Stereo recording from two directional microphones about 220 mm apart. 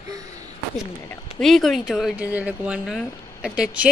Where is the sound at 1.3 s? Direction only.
Centre (ahead or behind).